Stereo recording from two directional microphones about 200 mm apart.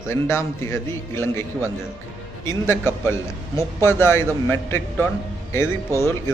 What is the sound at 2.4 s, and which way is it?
A man's voice, 15° left (ahead or behind).